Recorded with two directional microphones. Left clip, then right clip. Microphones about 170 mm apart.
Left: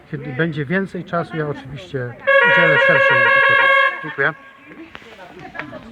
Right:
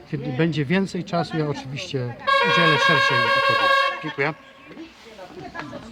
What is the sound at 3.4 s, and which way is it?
Music, 40° right (ahead or behind).